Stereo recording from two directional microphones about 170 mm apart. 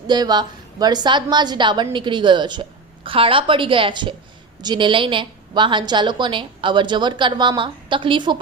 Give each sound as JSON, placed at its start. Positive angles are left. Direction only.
{"t": 0.1, "sound": "a woman's voice", "side_deg": -25}